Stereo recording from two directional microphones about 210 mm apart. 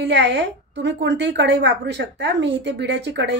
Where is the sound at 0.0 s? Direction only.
55° right (ahead or behind).